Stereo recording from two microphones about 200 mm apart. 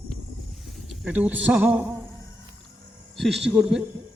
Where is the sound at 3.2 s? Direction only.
Centre (ahead or behind).